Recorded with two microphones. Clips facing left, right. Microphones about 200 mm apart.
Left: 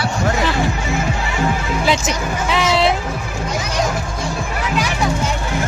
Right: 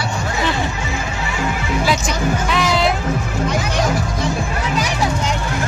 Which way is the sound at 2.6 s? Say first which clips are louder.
Left 3 dB; centre (ahead or behind).